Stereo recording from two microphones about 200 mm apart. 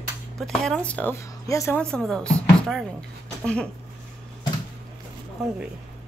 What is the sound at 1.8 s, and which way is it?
Speech, 5° left (ahead or behind).